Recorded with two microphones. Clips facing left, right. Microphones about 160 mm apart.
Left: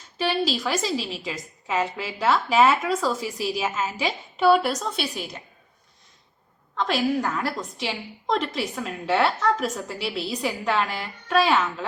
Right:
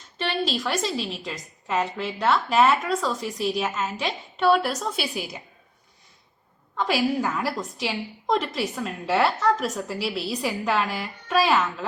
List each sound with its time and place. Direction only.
0.2 s a woman's voice: 5° left (ahead or behind)
6.7 s a woman's voice: 5° right (ahead or behind)